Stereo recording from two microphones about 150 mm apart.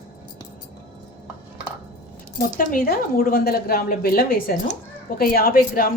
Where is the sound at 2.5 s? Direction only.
65° left (ahead or behind).